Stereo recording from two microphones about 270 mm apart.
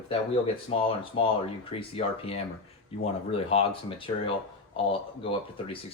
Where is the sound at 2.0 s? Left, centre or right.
Left.